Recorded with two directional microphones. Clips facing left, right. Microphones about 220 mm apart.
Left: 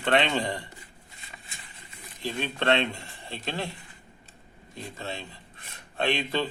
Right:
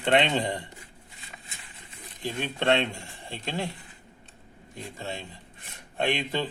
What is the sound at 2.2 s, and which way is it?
Speech, 15° right (ahead or behind).